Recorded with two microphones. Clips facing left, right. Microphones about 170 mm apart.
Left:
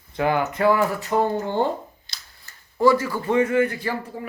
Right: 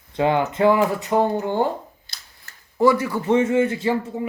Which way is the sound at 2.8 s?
20° right (ahead or behind).